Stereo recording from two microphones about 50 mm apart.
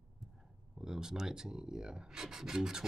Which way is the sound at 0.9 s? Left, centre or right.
Centre.